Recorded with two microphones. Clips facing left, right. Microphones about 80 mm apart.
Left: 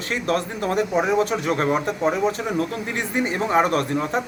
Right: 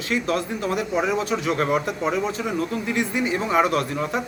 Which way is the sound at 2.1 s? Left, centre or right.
Left.